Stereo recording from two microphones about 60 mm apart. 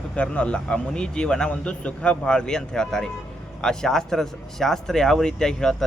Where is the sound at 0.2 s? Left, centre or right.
Left.